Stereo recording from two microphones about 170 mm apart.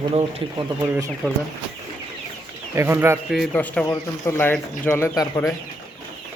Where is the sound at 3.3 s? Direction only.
5° left (ahead or behind).